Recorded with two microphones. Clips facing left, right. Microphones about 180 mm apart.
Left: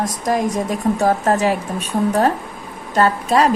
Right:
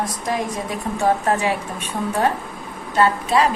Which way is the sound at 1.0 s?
40° left (ahead or behind).